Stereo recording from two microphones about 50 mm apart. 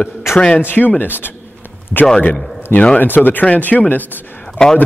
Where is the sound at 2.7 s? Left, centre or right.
Left.